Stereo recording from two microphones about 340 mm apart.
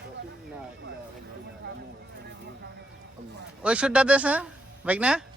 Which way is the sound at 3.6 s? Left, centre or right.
Centre.